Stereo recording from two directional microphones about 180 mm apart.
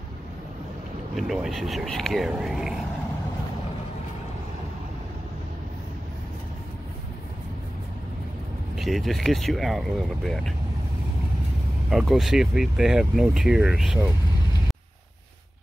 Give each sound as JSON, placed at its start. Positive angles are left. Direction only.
{"t": 1.1, "sound": "speech", "side_deg": 0}
{"t": 8.7, "sound": "speech", "side_deg": 0}
{"t": 11.9, "sound": "speech", "side_deg": 0}